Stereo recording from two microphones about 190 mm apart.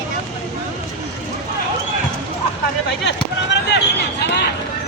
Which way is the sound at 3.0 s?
65° left (ahead or behind).